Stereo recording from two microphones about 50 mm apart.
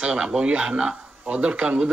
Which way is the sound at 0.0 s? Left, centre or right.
Right.